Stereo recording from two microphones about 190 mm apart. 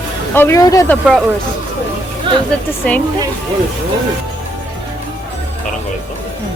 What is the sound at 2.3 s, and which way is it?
Speech, 25° right (ahead or behind).